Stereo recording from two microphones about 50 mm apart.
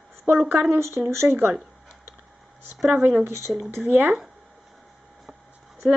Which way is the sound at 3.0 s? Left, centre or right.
Right.